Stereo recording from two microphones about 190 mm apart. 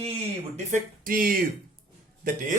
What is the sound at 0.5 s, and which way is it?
Speech, 45° right (ahead or behind).